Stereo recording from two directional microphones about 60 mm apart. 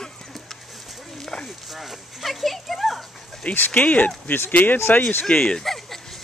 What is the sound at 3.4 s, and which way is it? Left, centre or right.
Speech, left.